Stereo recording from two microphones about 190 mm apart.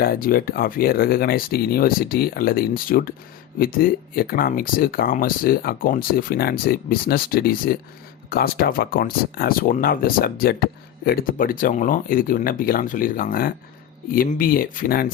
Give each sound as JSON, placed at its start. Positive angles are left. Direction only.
{"t": 0.0, "sound": "speech", "side_deg": 50}